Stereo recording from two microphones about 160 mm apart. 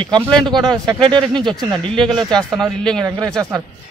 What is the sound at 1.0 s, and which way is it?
Speech, 30° right (ahead or behind).